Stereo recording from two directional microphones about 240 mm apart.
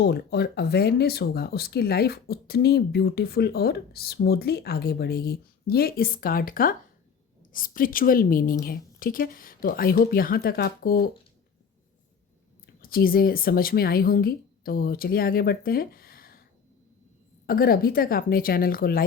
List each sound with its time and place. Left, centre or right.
0.0 s speech: left
12.8 s speech: left
17.4 s speech: left